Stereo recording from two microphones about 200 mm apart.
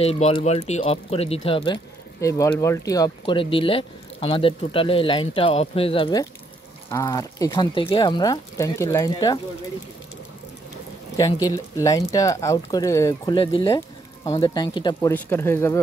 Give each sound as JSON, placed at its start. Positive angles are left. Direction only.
{"t": 0.0, "sound": "speech", "side_deg": 30}
{"t": 2.1, "sound": "speech", "side_deg": 15}
{"t": 11.4, "sound": "speech", "side_deg": 15}
{"t": 15.0, "sound": "speech", "side_deg": 10}